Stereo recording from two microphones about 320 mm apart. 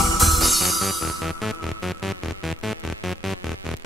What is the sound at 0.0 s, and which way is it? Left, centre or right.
Music, centre.